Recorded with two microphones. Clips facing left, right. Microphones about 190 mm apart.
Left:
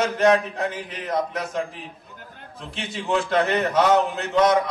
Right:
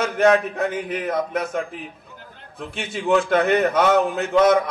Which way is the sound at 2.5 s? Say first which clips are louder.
Right 3 dB; 50° right (ahead or behind).